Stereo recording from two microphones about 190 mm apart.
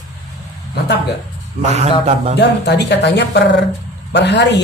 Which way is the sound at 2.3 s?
65° left (ahead or behind).